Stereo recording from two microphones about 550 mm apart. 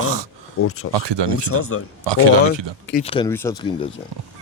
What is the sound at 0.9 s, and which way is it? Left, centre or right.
Speech, right.